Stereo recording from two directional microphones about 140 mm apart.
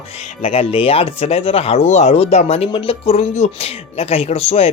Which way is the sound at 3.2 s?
55° left (ahead or behind).